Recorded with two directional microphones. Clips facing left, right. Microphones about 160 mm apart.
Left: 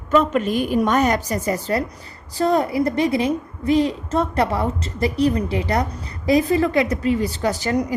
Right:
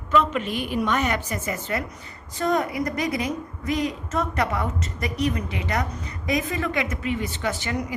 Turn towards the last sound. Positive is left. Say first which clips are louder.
# left 6 dB
turn(degrees=40)  # may be behind; listen again after turning